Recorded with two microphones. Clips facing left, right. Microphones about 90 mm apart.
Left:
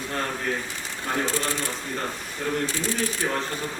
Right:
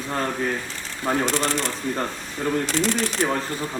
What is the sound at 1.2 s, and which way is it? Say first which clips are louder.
Speech: right 4 dB; 80° right.